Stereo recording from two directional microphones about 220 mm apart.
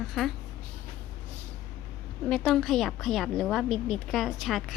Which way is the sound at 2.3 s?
Centre (ahead or behind).